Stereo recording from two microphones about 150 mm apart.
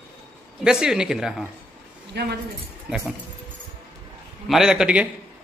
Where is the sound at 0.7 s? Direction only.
5° right (ahead or behind).